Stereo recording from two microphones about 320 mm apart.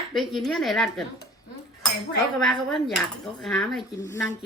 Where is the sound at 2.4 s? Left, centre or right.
Centre.